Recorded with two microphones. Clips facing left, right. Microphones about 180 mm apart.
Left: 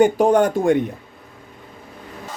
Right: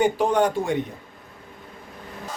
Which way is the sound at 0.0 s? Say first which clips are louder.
Left 5 dB; 45° left (ahead or behind).